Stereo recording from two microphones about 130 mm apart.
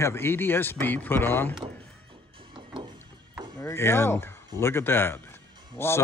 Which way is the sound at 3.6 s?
20° left (ahead or behind).